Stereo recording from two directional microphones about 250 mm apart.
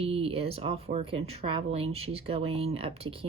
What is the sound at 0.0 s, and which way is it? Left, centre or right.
Speech, right.